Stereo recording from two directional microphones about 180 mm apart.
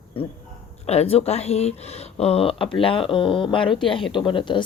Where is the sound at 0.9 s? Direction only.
35° left (ahead or behind).